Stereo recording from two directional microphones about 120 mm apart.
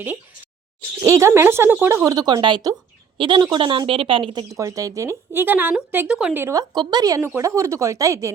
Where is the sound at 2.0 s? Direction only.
35° right (ahead or behind).